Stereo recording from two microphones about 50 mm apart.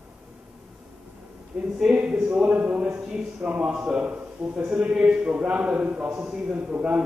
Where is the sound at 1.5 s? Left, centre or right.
Centre.